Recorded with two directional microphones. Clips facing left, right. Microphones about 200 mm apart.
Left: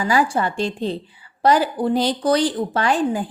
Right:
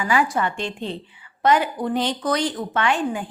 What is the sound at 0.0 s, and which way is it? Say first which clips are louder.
Speech: left 2 dB; 35° left (ahead or behind).